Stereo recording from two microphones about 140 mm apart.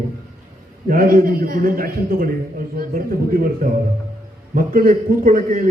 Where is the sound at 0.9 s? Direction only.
90° right.